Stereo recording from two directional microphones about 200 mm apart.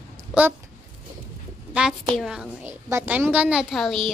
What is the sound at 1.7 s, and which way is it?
A woman's voice, 5° right (ahead or behind).